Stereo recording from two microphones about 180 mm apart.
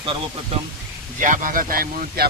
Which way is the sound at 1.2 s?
45° right (ahead or behind).